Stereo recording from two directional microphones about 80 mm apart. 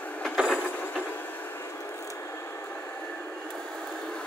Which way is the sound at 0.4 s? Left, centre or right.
Centre.